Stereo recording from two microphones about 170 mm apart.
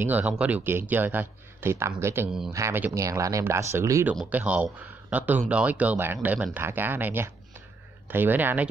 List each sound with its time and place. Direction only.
0.0 s speech: 10° right (ahead or behind)